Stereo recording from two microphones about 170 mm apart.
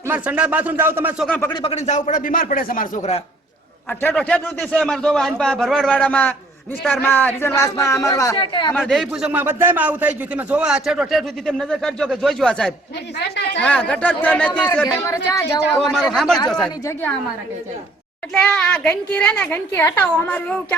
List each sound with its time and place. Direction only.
0.1 s speech: 10° right (ahead or behind)
1.6 s speech: 45° left (ahead or behind)
3.8 s a man's voice: 5° left (ahead or behind); by 8.7 s 25° left (ahead or behind)
8.8 s a man's voice: centre (ahead or behind)
18.3 s a woman's voice: 5° left (ahead or behind)